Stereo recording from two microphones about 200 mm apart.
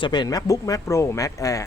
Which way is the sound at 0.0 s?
20° left (ahead or behind).